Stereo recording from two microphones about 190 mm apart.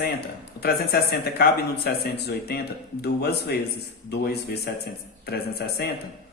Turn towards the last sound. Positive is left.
turn(degrees=55)  # may be behind; listen again after turning